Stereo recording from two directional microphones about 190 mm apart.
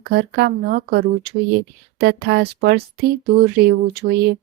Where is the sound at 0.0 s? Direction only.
55° right (ahead or behind).